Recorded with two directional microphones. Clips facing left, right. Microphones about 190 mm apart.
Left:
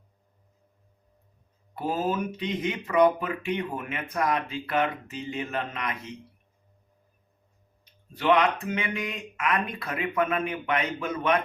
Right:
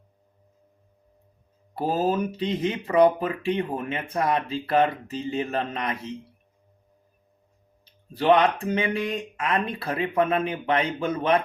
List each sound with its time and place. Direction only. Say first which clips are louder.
1.7 s speech: right 4 dB; 35° right (ahead or behind)
7.9 s speech: right 4 dB; 35° right (ahead or behind)